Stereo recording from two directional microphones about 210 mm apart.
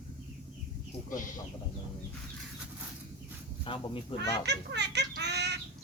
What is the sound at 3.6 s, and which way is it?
Speech, 25° left (ahead or behind).